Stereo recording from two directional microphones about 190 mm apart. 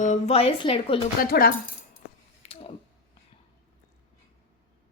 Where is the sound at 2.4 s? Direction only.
30° left (ahead or behind).